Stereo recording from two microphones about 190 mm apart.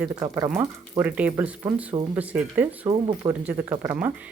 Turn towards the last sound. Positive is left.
turn(degrees=-10)  # may be behind; listen again after turning